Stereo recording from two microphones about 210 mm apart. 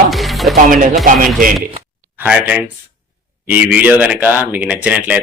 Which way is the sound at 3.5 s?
5° right (ahead or behind).